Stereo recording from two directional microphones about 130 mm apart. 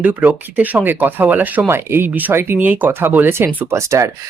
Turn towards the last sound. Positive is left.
turn(degrees=-20)  # may be behind; listen again after turning